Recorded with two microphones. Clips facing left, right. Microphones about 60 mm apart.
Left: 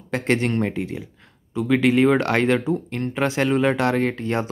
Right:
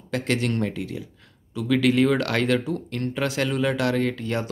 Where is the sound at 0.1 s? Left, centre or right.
Left.